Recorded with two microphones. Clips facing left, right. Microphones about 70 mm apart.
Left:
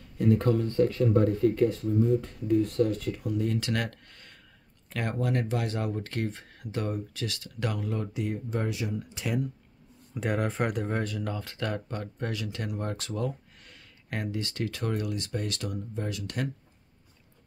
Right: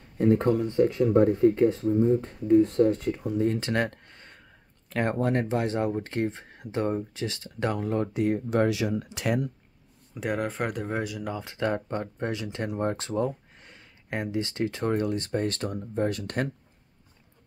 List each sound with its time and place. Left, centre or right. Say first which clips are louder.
0.0 s a sound: right 3 dB; right
0.5 s speech: right 2 dB; centre; by 8.4 s right
8.5 s speech: right 7 dB; right
10.1 s speech: even; centre; by 16.4 s right